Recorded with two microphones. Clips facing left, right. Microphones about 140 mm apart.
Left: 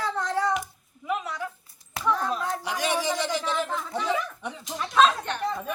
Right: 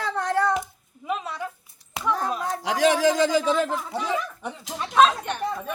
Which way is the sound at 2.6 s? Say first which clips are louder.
Right 7 dB; 90° right.